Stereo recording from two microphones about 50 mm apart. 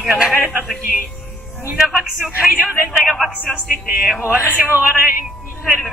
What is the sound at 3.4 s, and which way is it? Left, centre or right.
Speech, centre.